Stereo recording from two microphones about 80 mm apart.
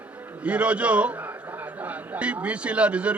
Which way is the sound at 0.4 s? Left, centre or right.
Centre.